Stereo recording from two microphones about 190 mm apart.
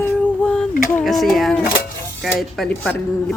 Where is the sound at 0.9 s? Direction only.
Centre (ahead or behind).